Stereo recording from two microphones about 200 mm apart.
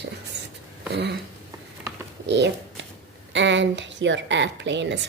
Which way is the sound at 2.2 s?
60° right (ahead or behind).